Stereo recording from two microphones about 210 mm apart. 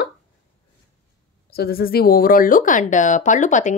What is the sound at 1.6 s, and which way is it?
Speech, 45° left (ahead or behind).